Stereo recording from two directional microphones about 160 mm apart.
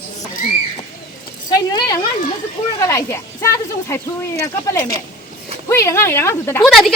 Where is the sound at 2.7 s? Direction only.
20° left (ahead or behind).